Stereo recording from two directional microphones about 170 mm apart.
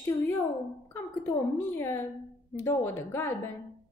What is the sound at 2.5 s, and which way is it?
Speech, 15° left (ahead or behind).